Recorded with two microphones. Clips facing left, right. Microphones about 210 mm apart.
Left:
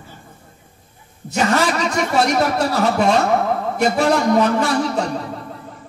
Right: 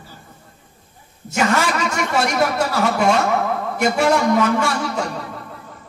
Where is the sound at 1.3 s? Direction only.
35° left (ahead or behind).